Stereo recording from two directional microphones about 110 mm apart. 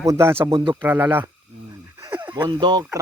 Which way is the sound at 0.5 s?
50° right (ahead or behind).